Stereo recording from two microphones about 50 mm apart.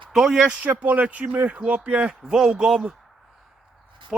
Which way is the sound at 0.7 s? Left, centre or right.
Right.